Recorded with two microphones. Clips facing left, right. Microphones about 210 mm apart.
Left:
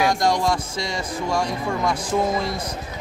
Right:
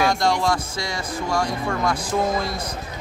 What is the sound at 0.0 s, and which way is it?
Speech, 15° left (ahead or behind).